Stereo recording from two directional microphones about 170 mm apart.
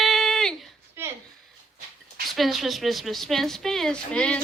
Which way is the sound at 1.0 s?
15° right (ahead or behind).